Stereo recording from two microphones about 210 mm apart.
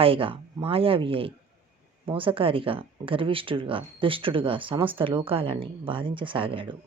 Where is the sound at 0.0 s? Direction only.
25° right (ahead or behind).